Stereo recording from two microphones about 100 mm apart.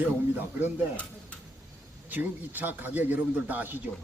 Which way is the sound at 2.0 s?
20° right (ahead or behind).